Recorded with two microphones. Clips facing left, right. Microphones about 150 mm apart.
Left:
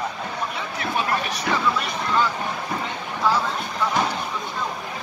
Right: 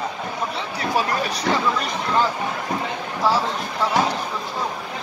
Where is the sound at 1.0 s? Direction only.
35° right (ahead or behind).